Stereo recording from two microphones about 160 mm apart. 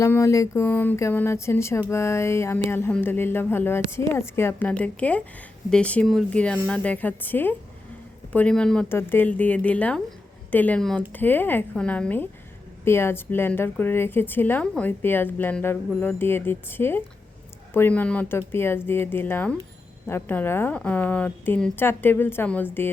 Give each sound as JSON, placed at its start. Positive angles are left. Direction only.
{"t": 0.0, "sound": "a woman's voice", "side_deg": 20}